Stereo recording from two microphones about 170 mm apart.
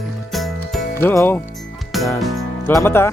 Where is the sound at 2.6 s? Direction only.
15° left (ahead or behind).